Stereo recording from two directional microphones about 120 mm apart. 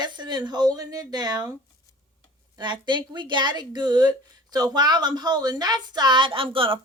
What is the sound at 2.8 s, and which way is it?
A woman's voice, 40° right (ahead or behind).